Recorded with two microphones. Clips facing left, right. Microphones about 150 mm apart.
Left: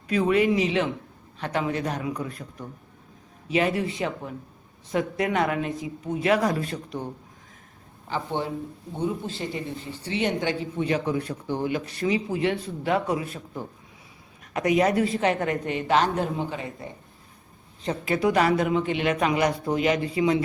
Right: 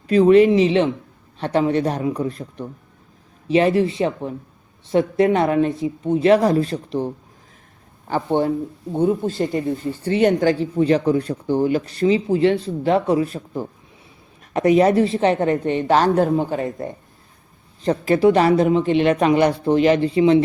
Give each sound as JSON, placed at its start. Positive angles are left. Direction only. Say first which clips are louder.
{"t": 0.1, "sound": "speech", "louder": "right 9 dB", "side_deg": -30}
{"t": 8.1, "sound": "a man's voice", "louder": "right 9 dB", "side_deg": -50}
{"t": 17.8, "sound": "speech", "louder": "right 9 dB", "side_deg": -35}